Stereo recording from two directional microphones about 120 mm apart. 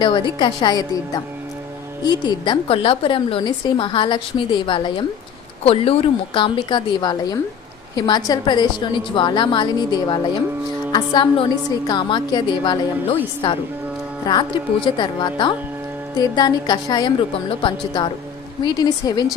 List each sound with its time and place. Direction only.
0.0 s a woman's voice: 40° left (ahead or behind)
14.3 s a woman's voice: 40° left (ahead or behind)